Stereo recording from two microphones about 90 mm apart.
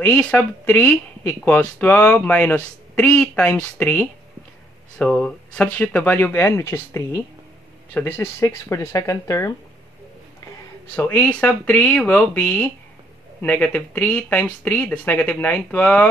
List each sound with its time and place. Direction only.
0.0 s speech: 15° left (ahead or behind); by 9.5 s 35° left (ahead or behind)
11.0 s speech: 15° left (ahead or behind)